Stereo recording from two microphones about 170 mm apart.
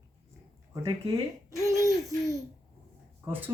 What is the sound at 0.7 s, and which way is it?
Speech, 20° right (ahead or behind).